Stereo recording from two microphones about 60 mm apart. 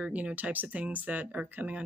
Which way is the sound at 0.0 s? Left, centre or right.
Right.